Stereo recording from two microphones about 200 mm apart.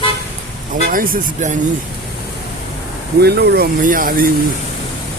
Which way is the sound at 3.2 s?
55° right (ahead or behind).